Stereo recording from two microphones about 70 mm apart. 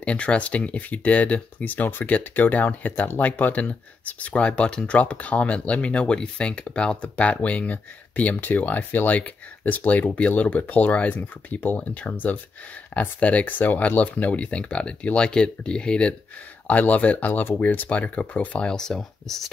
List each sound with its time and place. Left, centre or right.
0.0 s speech: centre
18.7 s speech: centre